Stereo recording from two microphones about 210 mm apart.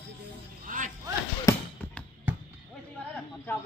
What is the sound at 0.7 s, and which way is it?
Music, 40° right (ahead or behind).